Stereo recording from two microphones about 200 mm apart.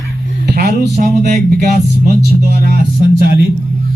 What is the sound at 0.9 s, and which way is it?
Speech, 40° right (ahead or behind).